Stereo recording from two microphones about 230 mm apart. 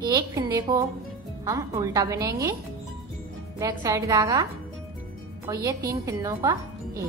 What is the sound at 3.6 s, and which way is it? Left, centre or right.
Speech, centre.